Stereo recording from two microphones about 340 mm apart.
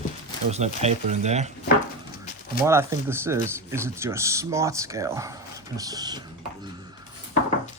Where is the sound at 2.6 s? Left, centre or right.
Centre.